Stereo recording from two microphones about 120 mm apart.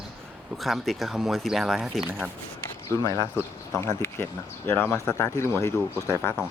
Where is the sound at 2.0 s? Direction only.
15° right (ahead or behind).